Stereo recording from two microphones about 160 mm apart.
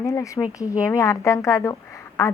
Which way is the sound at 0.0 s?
20° left (ahead or behind).